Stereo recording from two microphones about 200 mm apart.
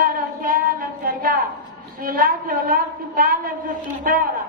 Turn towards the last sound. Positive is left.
turn(degrees=-45)  # may be behind; listen again after turning